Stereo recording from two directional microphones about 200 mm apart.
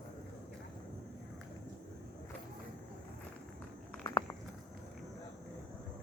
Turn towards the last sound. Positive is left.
turn(degrees=20)  # may be behind; listen again after turning